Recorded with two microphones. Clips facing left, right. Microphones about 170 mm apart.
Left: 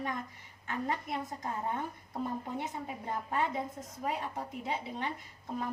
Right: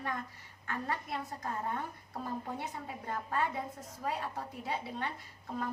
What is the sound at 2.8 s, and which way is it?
A woman's voice, 20° left (ahead or behind).